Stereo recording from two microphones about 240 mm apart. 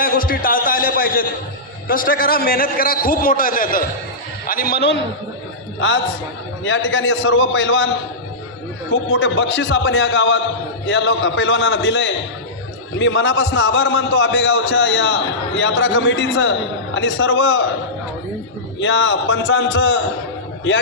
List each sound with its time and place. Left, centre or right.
0.0 s a sound: left
1.9 s a man's voice: left
6.7 s a man's voice: left
18.8 s a man's voice: left